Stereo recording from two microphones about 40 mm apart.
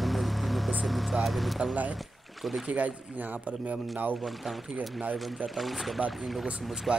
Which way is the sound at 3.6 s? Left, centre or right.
Right.